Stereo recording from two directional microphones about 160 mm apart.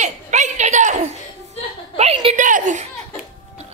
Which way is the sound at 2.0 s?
40° right (ahead or behind).